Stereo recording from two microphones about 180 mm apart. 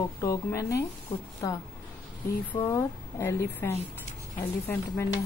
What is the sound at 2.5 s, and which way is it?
Speech, 15° left (ahead or behind).